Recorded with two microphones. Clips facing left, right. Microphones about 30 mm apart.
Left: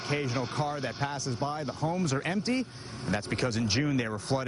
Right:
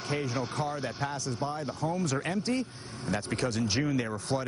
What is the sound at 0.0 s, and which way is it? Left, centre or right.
Speech, centre.